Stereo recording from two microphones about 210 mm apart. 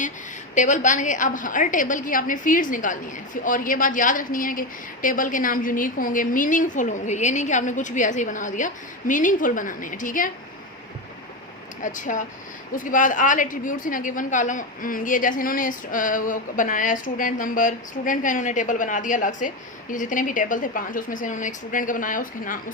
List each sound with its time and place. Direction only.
0.5 s a woman's voice: 35° left (ahead or behind)
11.8 s a woman's voice: 40° left (ahead or behind)